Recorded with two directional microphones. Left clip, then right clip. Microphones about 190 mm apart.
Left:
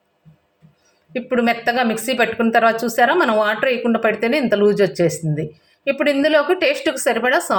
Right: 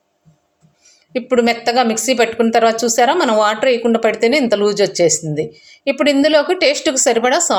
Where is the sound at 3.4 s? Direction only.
20° right (ahead or behind).